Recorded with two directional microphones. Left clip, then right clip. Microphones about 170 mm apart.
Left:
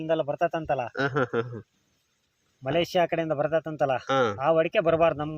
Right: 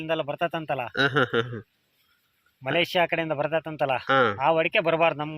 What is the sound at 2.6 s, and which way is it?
Speech, 35° left (ahead or behind).